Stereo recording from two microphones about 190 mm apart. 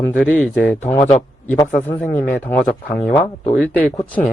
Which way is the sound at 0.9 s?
30° left (ahead or behind).